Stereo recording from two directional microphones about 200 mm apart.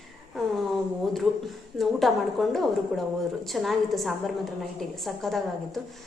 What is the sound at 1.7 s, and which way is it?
A woman's voice, centre (ahead or behind).